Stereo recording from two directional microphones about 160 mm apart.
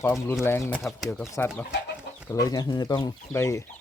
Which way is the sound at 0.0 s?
20° left (ahead or behind).